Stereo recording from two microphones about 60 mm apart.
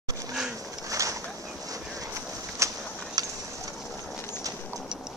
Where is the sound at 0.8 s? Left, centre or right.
Right.